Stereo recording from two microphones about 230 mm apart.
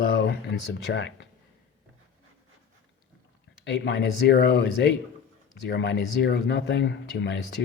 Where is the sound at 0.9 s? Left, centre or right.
Left.